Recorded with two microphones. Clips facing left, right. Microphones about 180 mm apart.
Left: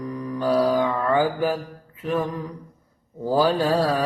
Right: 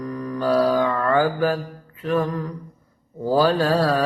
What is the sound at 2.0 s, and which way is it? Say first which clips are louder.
Mantra: right 3 dB; 10° left (ahead or behind).